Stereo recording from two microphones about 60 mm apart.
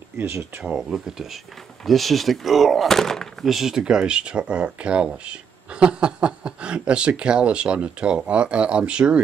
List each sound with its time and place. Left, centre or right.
0.2 s speech: right
0.7 s speech: centre
3.4 s speech: centre